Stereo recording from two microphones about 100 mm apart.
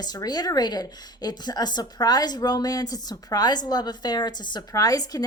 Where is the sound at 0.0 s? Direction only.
40° left (ahead or behind).